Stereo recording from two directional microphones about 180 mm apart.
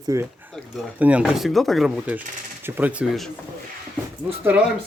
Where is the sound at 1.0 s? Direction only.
5° right (ahead or behind).